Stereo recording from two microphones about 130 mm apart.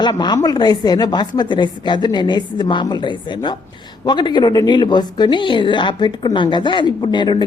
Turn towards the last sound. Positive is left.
turn(degrees=35)  # may be behind; listen again after turning